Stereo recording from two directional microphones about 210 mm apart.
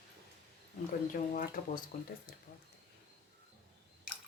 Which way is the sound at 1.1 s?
40° left (ahead or behind).